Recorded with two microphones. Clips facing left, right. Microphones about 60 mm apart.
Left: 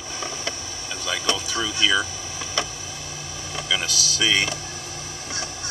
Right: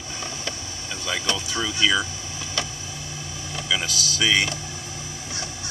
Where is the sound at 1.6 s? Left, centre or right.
Centre.